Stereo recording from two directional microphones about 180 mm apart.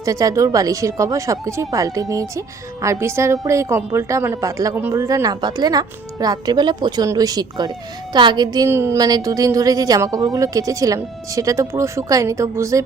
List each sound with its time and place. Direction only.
0.0 s a woman's voice: 20° right (ahead or behind)